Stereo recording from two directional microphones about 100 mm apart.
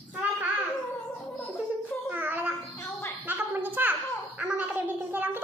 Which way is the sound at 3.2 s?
20° right (ahead or behind).